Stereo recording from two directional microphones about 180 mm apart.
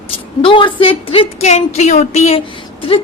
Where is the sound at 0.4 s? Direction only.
30° left (ahead or behind).